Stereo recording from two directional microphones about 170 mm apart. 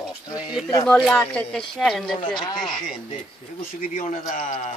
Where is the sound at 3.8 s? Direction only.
45° left (ahead or behind).